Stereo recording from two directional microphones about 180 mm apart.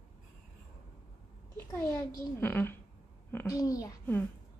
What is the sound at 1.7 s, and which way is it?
A child's voice, 15° left (ahead or behind).